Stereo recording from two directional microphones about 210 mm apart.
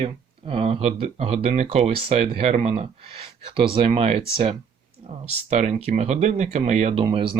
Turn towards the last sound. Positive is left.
turn(degrees=-25)  # may be behind; listen again after turning